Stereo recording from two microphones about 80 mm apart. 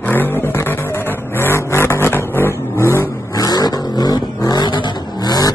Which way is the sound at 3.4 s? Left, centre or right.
Left.